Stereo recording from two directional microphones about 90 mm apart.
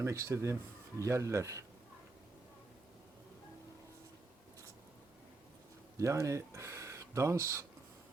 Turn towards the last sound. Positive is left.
turn(degrees=-35)  # may be behind; listen again after turning